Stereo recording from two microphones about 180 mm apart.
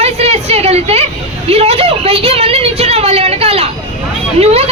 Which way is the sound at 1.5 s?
35° right (ahead or behind).